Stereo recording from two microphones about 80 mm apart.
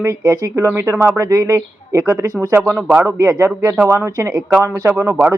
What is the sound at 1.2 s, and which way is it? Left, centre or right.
Speech, right.